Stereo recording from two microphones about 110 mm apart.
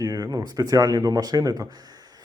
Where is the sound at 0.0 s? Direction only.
35° right (ahead or behind).